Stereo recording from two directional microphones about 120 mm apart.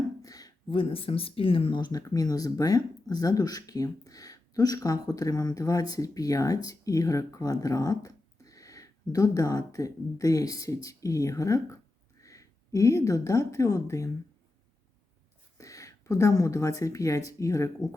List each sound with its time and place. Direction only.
0.2 s a sound: 30° left (ahead or behind)
0.7 s speech: 50° left (ahead or behind); by 14.1 s 25° left (ahead or behind)
15.5 s speech: 25° left (ahead or behind)